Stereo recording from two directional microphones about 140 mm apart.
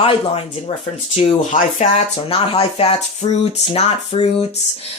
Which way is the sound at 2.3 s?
40° left (ahead or behind).